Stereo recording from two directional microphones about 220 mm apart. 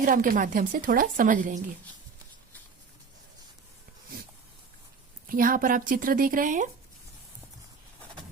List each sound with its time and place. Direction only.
0.0 s speech: 40° right (ahead or behind)
5.2 s speech: 40° right (ahead or behind)